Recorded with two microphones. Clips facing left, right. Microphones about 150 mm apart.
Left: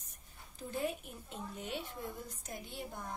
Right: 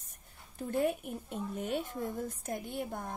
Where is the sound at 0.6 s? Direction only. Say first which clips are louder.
Right 7 dB; 55° right (ahead or behind).